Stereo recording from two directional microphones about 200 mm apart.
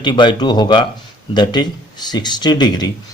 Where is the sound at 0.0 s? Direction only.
25° left (ahead or behind).